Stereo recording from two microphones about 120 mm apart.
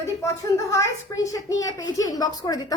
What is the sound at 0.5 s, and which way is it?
A woman's voice, 25° left (ahead or behind).